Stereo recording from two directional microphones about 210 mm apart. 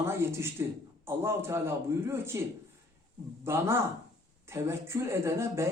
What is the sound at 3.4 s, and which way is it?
A man's voice, 10° right (ahead or behind).